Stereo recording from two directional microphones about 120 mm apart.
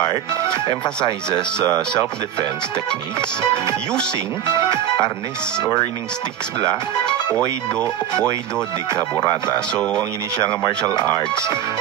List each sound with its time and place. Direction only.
0.0 s speech: 35° left (ahead or behind)
2.9 s speech: 40° left (ahead or behind)
4.5 s music: 35° left (ahead or behind)
5.6 s speech: 35° left (ahead or behind)
7.3 s speech: 10° left (ahead or behind)
9.8 s speech: 5° left (ahead or behind)
11.0 s speech: 40° left (ahead or behind)